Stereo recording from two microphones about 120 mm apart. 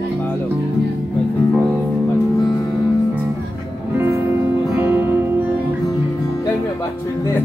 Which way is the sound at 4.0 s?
20° right (ahead or behind).